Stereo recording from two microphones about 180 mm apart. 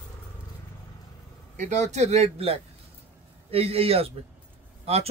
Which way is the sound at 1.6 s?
40° right (ahead or behind).